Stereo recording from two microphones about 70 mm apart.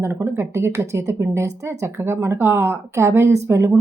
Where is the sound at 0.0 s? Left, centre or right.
Right.